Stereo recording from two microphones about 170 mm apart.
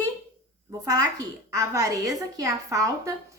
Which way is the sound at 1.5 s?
20° right (ahead or behind).